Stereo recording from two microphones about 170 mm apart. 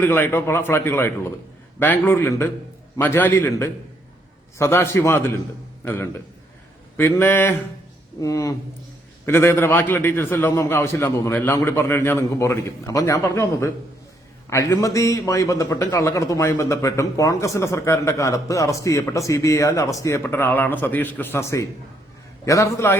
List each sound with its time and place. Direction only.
0.0 s a man's voice: 15° left (ahead or behind)